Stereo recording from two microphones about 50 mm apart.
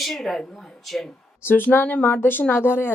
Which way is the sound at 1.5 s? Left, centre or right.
Left.